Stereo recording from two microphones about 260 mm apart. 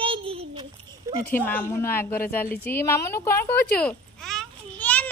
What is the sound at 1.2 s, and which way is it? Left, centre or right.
A woman's voice, centre.